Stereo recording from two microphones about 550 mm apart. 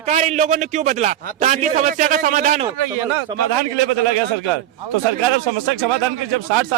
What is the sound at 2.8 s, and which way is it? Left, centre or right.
Speech, right.